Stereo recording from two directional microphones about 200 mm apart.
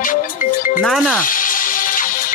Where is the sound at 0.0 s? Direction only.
40° left (ahead or behind).